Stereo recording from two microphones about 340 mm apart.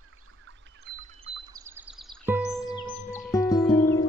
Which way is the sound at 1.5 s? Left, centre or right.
Centre.